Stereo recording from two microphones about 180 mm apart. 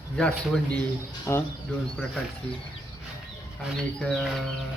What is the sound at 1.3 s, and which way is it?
Speech, 15° left (ahead or behind).